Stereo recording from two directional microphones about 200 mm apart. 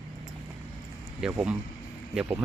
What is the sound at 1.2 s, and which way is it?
Speech, 5° right (ahead or behind).